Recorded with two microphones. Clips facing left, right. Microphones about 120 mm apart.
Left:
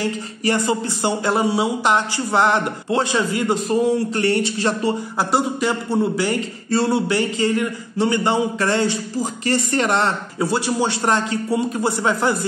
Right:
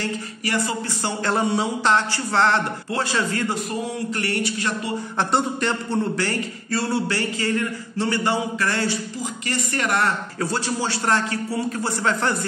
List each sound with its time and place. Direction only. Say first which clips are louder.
0.5 s a man's voice: left 5 dB; 20° left (ahead or behind)
1.3 s a man's voice: even; 5° left (ahead or behind); by 4.9 s 30° left (ahead or behind)
5.3 s a man's voice: left 3 dB; 5° left (ahead or behind); by 10.1 s 25° left (ahead or behind)
10.4 s a man's voice: left 5 dB; 15° left (ahead or behind)